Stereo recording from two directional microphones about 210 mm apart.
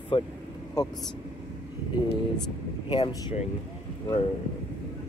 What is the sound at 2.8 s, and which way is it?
Speech, 25° left (ahead or behind).